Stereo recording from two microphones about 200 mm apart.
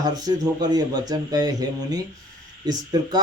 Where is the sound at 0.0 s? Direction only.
20° right (ahead or behind).